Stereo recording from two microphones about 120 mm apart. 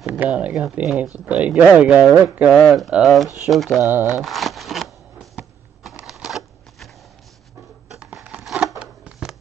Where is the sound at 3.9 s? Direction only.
20° right (ahead or behind).